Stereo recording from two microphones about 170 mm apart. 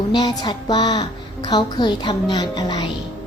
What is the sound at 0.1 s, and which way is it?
A woman's voice, 25° left (ahead or behind).